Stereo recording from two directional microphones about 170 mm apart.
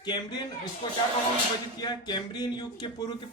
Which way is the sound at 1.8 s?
25° left (ahead or behind).